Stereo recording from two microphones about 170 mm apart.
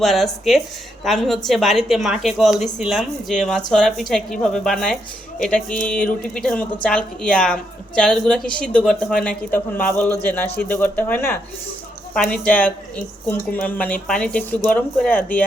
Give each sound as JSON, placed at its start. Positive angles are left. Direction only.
{"t": 0.0, "sound": "a woman's voice", "side_deg": 0}